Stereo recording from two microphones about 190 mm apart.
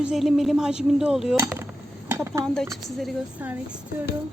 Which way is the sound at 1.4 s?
10° right (ahead or behind).